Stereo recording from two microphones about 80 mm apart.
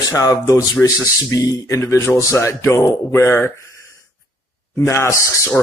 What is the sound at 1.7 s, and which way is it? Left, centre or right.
A man's voice, left.